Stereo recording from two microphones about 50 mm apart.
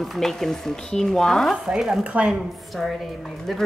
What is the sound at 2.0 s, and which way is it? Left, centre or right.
Speech, right.